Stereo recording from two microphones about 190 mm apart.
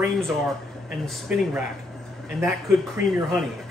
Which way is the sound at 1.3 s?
5° right (ahead or behind).